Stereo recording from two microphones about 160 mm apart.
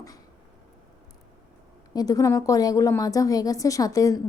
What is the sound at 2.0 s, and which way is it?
A woman's voice, 20° left (ahead or behind).